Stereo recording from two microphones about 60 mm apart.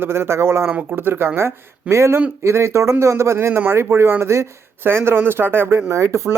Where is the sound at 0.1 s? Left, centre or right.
Right.